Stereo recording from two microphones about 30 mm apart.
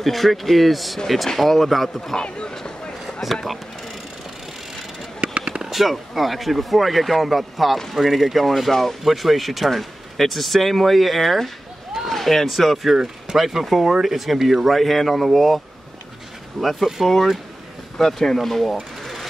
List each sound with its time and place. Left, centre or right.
0.0 s speech: centre
2.2 s speech: left
3.2 s speech: centre
5.4 s a sound: right
5.7 s speech: centre
12.9 s speech: centre
14.8 s speech: centre
16.6 s speech: centre
17.9 s speech: centre